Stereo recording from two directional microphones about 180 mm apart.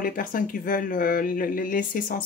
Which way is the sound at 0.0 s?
50° left (ahead or behind).